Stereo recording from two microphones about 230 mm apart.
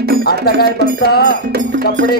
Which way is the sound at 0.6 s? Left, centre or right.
Right.